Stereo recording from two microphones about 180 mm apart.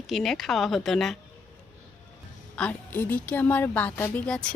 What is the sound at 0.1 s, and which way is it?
Speech, centre (ahead or behind).